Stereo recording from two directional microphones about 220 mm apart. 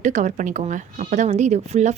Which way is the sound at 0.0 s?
35° right (ahead or behind).